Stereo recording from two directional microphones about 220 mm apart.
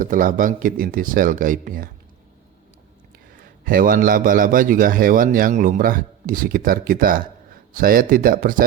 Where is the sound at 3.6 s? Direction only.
40° right (ahead or behind).